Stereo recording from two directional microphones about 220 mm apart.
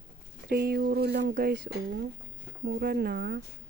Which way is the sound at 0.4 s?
45° right (ahead or behind).